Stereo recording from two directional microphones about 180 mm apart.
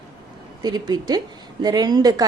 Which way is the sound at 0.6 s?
20° right (ahead or behind).